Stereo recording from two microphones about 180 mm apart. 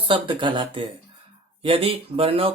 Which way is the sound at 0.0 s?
30° right (ahead or behind).